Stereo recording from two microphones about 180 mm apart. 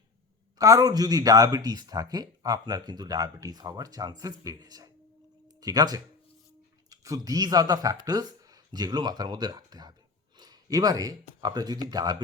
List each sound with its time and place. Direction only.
0.6 s speech: 20° right (ahead or behind)
10.3 s a sound: 20° right (ahead or behind)
11.3 s speech: 20° right (ahead or behind)